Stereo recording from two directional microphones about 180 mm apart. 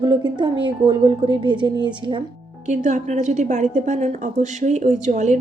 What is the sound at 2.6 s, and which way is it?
A woman's voice, 40° right (ahead or behind).